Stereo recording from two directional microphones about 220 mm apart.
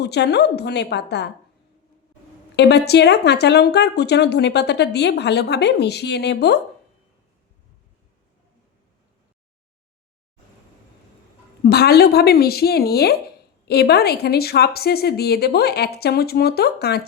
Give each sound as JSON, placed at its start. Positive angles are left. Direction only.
{"t": 0.0, "sound": "speech", "side_deg": 50}
{"t": 2.6, "sound": "speech", "side_deg": 50}
{"t": 11.6, "sound": "speech", "side_deg": 45}